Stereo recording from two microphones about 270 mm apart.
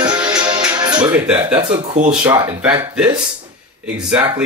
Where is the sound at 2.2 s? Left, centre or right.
Centre.